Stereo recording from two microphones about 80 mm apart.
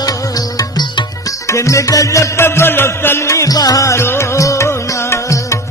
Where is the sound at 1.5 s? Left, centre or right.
Left.